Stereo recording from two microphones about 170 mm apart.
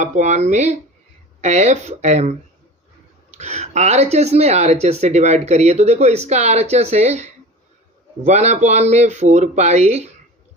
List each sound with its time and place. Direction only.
0.0 s speech: 45° right (ahead or behind)
3.3 s speech: 40° right (ahead or behind)